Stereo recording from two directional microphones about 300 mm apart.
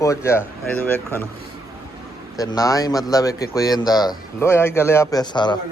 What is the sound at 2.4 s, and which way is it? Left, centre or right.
Speech, centre.